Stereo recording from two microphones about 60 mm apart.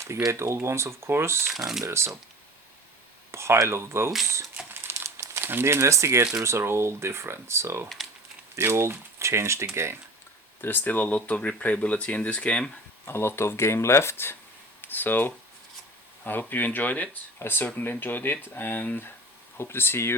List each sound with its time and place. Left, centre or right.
0.3 s speech: right
1.5 s speech: centre
1.8 s speech: right
3.3 s speech: right
4.7 s crumpling: right
5.5 s speech: right
10.6 s speech: left
13.1 s speech: left
17.4 s speech: left